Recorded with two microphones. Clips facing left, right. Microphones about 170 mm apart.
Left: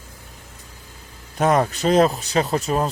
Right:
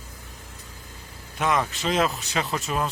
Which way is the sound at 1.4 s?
40° left (ahead or behind).